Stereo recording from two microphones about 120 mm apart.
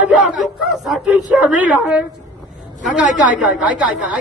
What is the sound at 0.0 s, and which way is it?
A man's voice, 5° right (ahead or behind).